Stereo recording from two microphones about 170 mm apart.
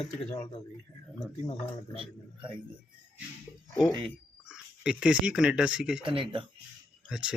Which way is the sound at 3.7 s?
10° left (ahead or behind).